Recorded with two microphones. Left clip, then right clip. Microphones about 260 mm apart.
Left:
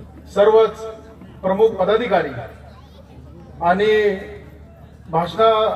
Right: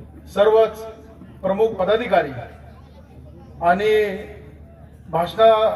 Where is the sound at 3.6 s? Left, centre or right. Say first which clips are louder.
Left 1 dB; right.